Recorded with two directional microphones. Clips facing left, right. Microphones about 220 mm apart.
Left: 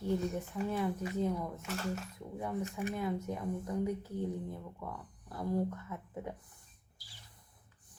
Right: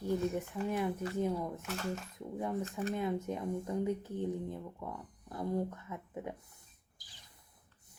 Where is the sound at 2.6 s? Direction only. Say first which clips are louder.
Right 1 dB; 15° left (ahead or behind).